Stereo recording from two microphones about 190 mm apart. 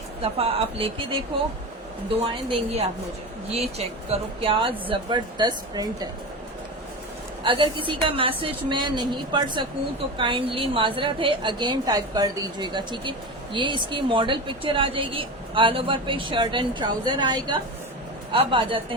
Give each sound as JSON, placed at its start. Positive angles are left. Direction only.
{"t": 0.2, "sound": "a woman's voice", "side_deg": -30}
{"t": 7.4, "sound": "a woman's voice", "side_deg": -25}